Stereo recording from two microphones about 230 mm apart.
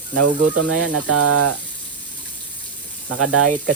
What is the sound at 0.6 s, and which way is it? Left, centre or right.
Speech, right.